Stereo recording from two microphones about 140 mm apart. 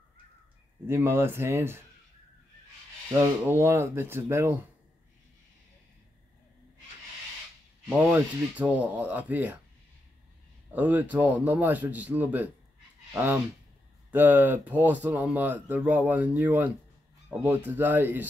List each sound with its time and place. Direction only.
0.8 s speech: 15° right (ahead or behind)
3.1 s speech: 20° right (ahead or behind)
8.0 s speech: 10° right (ahead or behind)
10.7 s speech: 10° right (ahead or behind)